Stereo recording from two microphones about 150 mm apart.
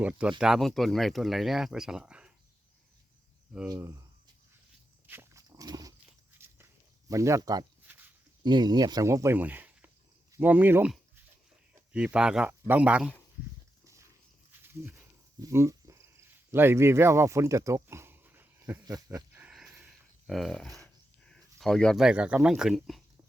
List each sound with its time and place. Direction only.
0.0 s speech: 5° right (ahead or behind)
5.0 s dog: 15° right (ahead or behind)
6.4 s walk: 15° right (ahead or behind)
7.1 s a man's voice: 20° right (ahead or behind)
13.8 s a sound: 20° right (ahead or behind)
19.4 s a sound: 5° right (ahead or behind)
20.8 s speech: 5° left (ahead or behind)